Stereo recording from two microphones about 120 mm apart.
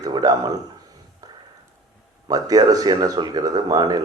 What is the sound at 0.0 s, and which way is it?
Speech, 30° right (ahead or behind).